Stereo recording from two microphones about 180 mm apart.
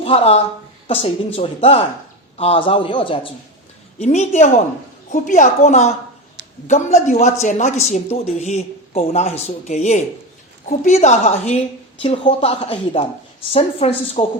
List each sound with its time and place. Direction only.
0.0 s a woman's voice: 35° left (ahead or behind)
3.9 s speech: 40° left (ahead or behind)